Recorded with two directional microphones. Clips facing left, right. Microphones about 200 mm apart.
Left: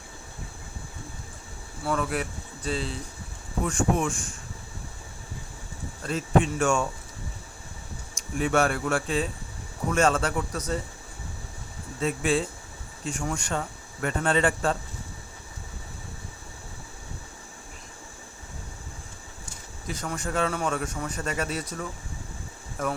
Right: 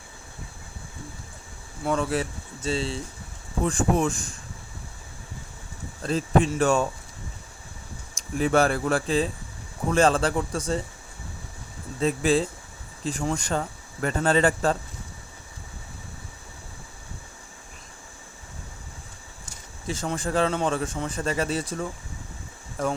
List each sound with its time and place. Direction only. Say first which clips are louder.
1.8 s speech: right 3 dB; 25° right (ahead or behind)
6.1 s speech: right 2 dB; 35° right (ahead or behind)
8.1 s speech: right 3 dB; 35° right (ahead or behind)
11.9 s speech: right 3 dB; 35° right (ahead or behind)
19.9 s speech: right 4 dB; 30° right (ahead or behind)